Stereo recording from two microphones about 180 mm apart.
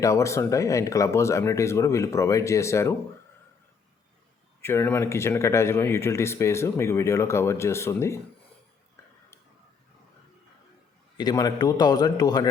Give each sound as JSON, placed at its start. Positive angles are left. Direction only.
{"t": 0.0, "sound": "speech", "side_deg": 15}
{"t": 4.6, "sound": "speech", "side_deg": 10}
{"t": 11.2, "sound": "a man's voice", "side_deg": 20}